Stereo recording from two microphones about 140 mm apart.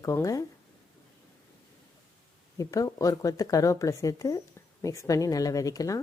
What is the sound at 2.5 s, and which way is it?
Speech, 25° left (ahead or behind).